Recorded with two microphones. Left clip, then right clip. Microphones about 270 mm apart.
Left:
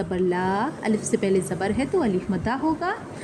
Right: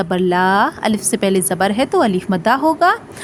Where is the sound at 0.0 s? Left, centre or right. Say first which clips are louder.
Right 9 dB; right.